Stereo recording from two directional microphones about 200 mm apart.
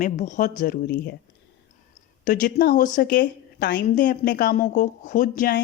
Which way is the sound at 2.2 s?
45° left (ahead or behind).